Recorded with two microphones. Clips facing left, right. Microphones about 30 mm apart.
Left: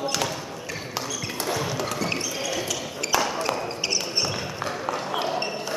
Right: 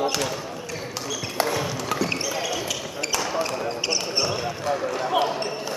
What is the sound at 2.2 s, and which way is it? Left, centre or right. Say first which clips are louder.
Basketball bounce: right 2 dB; centre.